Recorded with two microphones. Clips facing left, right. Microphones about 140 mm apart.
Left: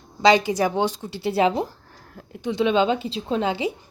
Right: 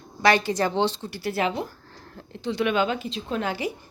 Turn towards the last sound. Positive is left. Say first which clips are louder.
# left 4 dB
turn(degrees=20)  # may be behind; listen again after turning